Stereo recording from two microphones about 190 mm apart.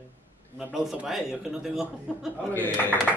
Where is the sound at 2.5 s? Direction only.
10° left (ahead or behind).